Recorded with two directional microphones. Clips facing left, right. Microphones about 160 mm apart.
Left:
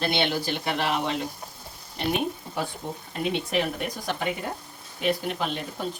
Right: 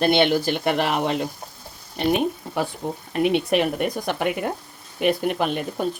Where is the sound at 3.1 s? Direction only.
65° right (ahead or behind).